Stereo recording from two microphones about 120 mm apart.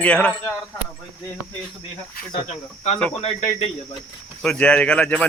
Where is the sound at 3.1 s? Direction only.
60° left (ahead or behind).